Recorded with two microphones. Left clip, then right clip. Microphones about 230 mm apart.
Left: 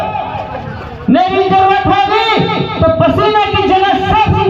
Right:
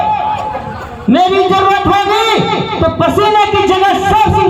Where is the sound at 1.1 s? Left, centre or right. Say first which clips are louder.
Even; right.